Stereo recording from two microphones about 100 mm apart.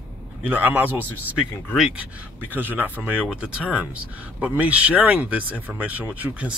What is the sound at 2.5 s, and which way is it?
Speech, 20° right (ahead or behind).